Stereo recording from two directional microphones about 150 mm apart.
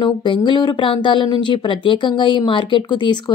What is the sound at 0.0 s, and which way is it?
Speech, 30° left (ahead or behind).